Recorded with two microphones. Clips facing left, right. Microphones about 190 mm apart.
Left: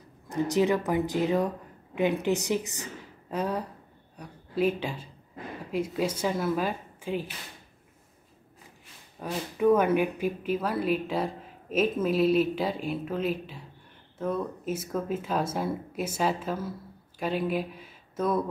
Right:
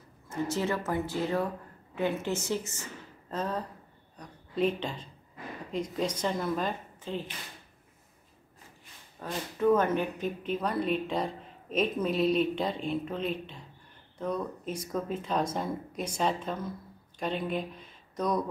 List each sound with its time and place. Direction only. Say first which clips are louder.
0.3 s a woman's voice: left 6 dB; 15° left (ahead or behind)
9.2 s speech: left 3 dB; 10° left (ahead or behind)